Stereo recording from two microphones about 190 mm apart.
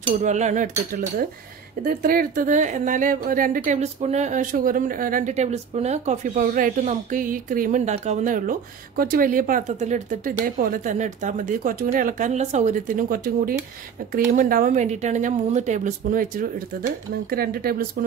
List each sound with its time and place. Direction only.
0.2 s speech: 40° right (ahead or behind)